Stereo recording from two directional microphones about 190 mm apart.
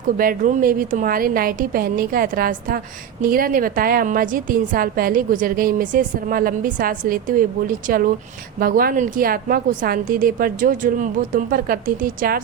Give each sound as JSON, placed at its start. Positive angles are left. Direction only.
{"t": 0.2, "sound": "a woman's voice", "side_deg": -50}